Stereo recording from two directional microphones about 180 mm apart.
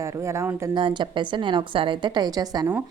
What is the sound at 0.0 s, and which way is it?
Speech, 15° right (ahead or behind).